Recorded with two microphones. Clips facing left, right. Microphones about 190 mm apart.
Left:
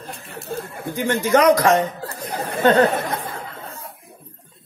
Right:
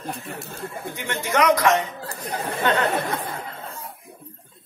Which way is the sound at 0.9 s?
35° left (ahead or behind).